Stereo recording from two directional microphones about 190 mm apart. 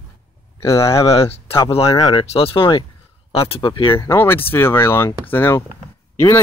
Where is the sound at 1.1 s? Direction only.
30° left (ahead or behind).